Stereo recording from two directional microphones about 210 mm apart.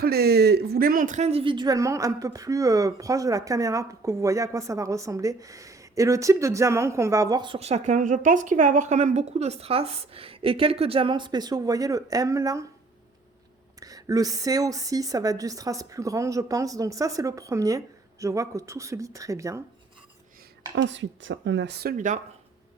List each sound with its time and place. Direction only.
0.0 s a woman's voice: 50° right (ahead or behind); by 12.6 s 15° right (ahead or behind)
13.7 s a woman's voice: 15° right (ahead or behind)
20.7 s speech: 60° right (ahead or behind); by 22.2 s 35° right (ahead or behind)